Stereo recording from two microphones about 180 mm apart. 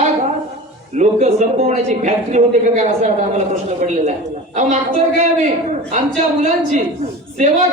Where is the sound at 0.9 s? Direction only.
40° right (ahead or behind).